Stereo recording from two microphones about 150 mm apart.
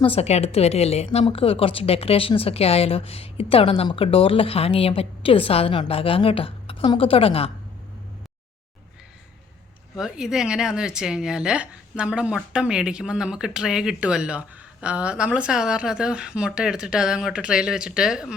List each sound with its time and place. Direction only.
0.0 s a woman's voice: 40° left (ahead or behind)
9.9 s speech: 5° right (ahead or behind)